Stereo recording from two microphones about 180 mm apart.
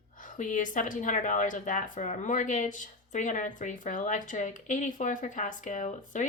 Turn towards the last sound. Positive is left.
turn(degrees=40)  # may be behind; listen again after turning